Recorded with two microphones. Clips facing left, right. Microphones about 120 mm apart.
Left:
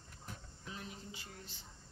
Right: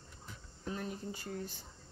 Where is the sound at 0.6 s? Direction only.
45° right (ahead or behind).